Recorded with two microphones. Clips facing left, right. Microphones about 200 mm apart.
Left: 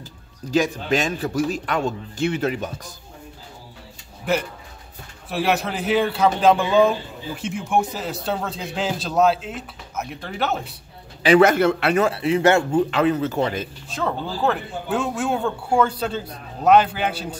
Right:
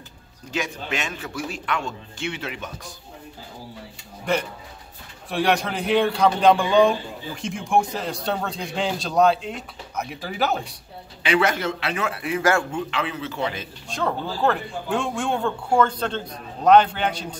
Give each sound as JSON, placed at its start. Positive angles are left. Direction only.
{"t": 0.5, "sound": "a man's voice", "side_deg": 35}
{"t": 4.3, "sound": "a man's voice", "side_deg": 5}
{"t": 11.2, "sound": "speech", "side_deg": 45}
{"t": 12.1, "sound": "speech", "side_deg": 25}
{"t": 12.9, "sound": "speech", "side_deg": 40}
{"t": 13.8, "sound": "speech", "side_deg": 5}